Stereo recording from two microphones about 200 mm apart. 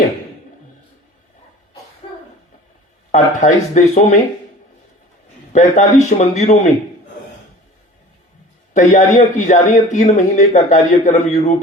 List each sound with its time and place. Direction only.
2.0 s a sound: 30° left (ahead or behind)
3.1 s a man's voice: 35° left (ahead or behind)
5.5 s a man's voice: 35° left (ahead or behind)
8.7 s a man's voice: 35° left (ahead or behind)